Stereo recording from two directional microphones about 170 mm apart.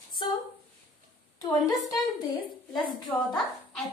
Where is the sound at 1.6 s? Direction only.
20° left (ahead or behind).